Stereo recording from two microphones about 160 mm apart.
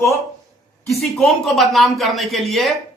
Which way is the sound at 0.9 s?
Centre (ahead or behind).